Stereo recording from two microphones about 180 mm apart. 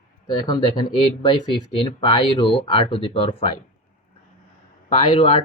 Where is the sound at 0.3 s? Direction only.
25° left (ahead or behind).